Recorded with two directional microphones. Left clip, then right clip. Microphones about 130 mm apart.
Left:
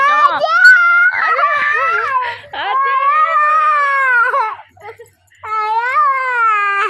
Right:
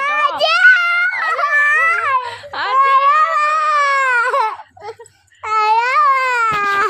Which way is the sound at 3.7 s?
25° right (ahead or behind).